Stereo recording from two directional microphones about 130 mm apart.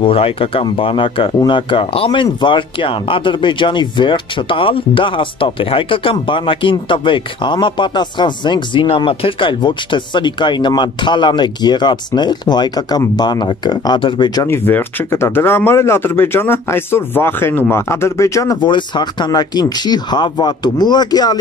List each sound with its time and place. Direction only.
0.0 s speech: 45° left (ahead or behind)
14.5 s speech: 15° left (ahead or behind)